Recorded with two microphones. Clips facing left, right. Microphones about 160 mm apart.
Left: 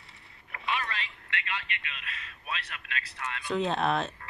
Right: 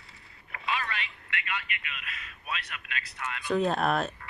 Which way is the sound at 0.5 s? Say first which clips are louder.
Even; 30° left (ahead or behind).